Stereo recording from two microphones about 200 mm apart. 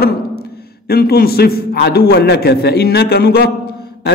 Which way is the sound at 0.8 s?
50° left (ahead or behind).